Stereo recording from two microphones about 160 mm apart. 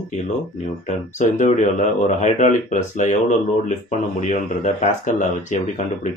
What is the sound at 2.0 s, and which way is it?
Speech, 50° left (ahead or behind).